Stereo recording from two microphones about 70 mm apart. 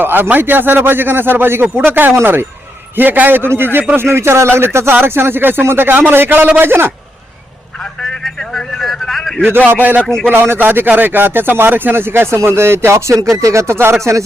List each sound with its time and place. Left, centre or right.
0.0 s a man's voice: right
8.2 s speech: centre
10.2 s a man's voice: right
14.0 s speech: right